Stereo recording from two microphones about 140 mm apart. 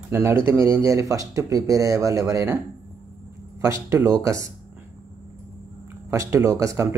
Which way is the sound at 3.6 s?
20° right (ahead or behind).